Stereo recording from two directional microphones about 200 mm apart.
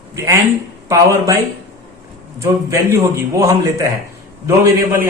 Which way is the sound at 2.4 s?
15° right (ahead or behind).